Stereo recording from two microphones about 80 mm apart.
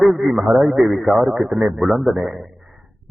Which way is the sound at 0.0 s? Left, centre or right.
Centre.